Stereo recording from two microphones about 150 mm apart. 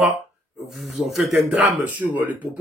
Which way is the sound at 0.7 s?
Centre (ahead or behind).